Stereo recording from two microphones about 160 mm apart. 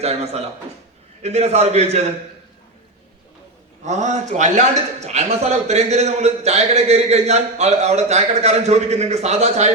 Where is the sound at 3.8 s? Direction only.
45° right (ahead or behind).